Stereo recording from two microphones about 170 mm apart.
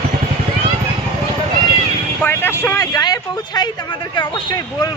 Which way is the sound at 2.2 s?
15° left (ahead or behind).